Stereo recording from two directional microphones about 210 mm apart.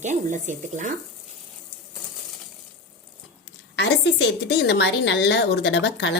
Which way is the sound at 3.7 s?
55° left (ahead or behind).